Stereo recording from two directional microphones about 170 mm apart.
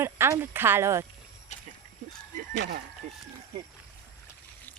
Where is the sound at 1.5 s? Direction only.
40° left (ahead or behind).